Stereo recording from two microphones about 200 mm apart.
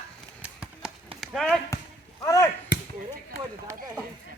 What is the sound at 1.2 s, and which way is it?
Speech, centre (ahead or behind).